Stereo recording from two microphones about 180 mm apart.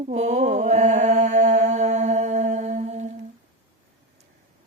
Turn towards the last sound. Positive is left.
turn(degrees=-40)  # may be behind; listen again after turning